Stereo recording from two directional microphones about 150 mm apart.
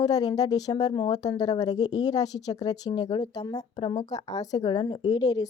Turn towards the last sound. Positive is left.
turn(degrees=25)  # may be behind; listen again after turning